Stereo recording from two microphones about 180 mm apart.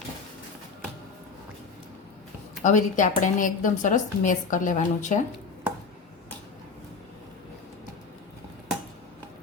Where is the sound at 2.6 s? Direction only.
45° left (ahead or behind).